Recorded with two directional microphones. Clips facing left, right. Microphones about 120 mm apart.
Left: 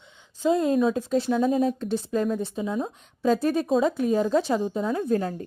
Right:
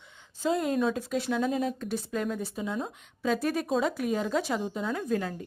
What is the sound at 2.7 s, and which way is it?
Speech, 5° left (ahead or behind).